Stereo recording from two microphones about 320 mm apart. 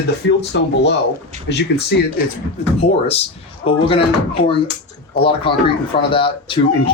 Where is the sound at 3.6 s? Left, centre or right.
Centre.